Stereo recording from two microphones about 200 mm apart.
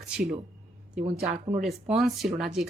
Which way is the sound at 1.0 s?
30° right (ahead or behind).